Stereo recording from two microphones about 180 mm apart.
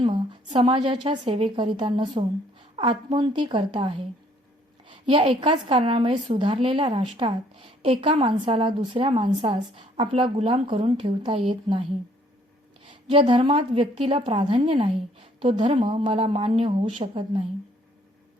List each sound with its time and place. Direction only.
0.0 s a woman's voice: 30° right (ahead or behind)
12.9 s a woman's voice: 30° right (ahead or behind)